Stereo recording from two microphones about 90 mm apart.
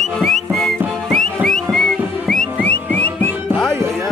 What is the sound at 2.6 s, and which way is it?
Music, 20° left (ahead or behind).